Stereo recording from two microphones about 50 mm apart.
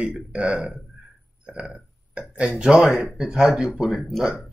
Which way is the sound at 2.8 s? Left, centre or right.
Centre.